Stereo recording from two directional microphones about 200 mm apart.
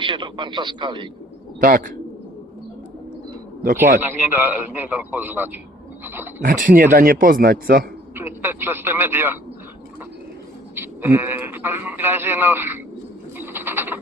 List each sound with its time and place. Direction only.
0.0 s speech: 25° right (ahead or behind)
1.6 s speech: 45° right (ahead or behind)
4.0 s a man's voice: 10° right (ahead or behind)
6.4 s speech: 40° right (ahead or behind)
8.1 s a man's voice: 10° right (ahead or behind)
10.8 s a man's voice: 10° right (ahead or behind)
13.4 s frog: 10° right (ahead or behind)